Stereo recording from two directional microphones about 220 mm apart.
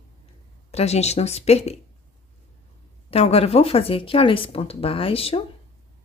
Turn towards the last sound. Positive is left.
turn(degrees=25)  # may be behind; listen again after turning